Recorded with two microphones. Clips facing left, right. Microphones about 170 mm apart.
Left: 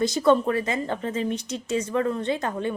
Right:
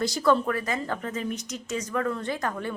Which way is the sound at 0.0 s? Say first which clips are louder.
Left 3 dB; 20° left (ahead or behind).